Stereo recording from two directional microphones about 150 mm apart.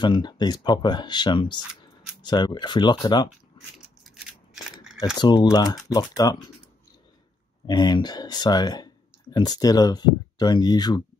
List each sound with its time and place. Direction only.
0.0 s speech: 30° left (ahead or behind)
3.6 s a sound: 35° left (ahead or behind)
4.0 s scissors: 5° right (ahead or behind)
5.1 s speech: 30° left (ahead or behind)
7.6 s speech: 30° left (ahead or behind)